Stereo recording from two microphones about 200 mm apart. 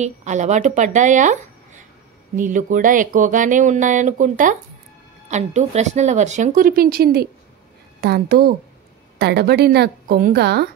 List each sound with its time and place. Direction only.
0.0 s a woman's voice: 35° right (ahead or behind); by 10.7 s 55° right (ahead or behind)